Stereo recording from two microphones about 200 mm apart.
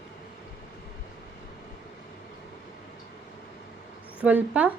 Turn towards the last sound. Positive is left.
turn(degrees=-5)  # may be behind; listen again after turning